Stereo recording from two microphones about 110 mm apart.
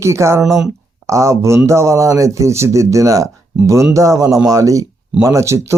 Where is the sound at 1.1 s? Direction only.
25° right (ahead or behind).